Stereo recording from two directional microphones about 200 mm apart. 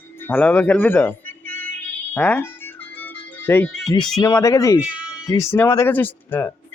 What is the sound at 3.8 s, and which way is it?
Speech, 20° left (ahead or behind).